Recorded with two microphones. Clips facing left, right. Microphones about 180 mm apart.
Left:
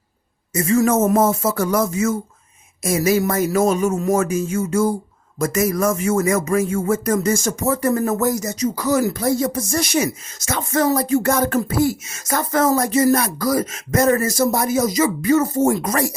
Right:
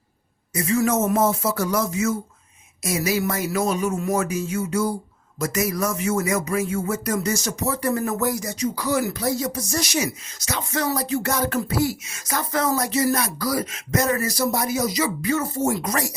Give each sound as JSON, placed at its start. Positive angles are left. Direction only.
{"t": 0.5, "sound": "speech", "side_deg": 45}